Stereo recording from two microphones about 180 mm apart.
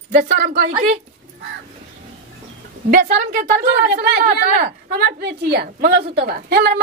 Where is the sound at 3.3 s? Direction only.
55° right (ahead or behind).